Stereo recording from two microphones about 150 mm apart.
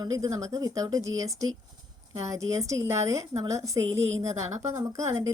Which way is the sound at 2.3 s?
20° right (ahead or behind).